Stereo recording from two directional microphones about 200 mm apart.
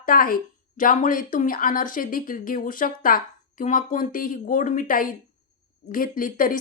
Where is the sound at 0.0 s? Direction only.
45° left (ahead or behind).